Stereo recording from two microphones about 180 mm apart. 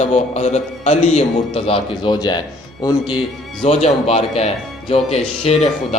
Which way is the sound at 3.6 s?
35° left (ahead or behind).